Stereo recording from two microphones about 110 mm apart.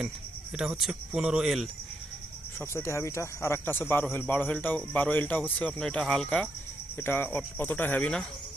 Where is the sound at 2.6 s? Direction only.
25° left (ahead or behind); by 6.4 s 5° left (ahead or behind).